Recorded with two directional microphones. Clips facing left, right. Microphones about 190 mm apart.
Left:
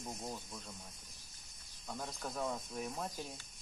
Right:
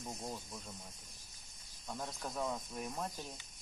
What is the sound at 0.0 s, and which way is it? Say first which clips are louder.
Speech: even; centre (ahead or behind).